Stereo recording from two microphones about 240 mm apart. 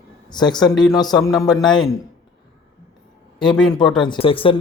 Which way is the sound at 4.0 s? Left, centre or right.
Left.